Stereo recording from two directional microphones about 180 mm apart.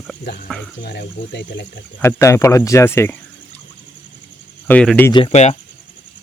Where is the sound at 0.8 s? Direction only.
70° left (ahead or behind).